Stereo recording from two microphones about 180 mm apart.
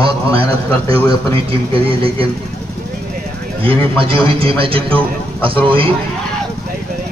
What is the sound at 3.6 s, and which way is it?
A man's voice, 30° right (ahead or behind).